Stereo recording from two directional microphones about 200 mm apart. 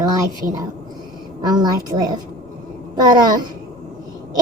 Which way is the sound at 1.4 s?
20° right (ahead or behind).